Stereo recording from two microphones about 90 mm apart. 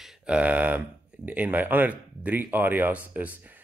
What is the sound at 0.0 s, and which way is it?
Speech, 5° right (ahead or behind).